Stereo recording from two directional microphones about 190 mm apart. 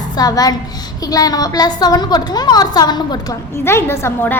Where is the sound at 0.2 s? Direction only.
20° left (ahead or behind).